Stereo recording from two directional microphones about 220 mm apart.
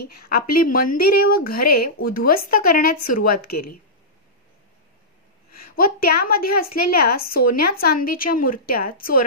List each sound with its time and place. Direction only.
0.0 s a woman's voice: 40° left (ahead or behind)
5.6 s a woman's voice: 40° left (ahead or behind)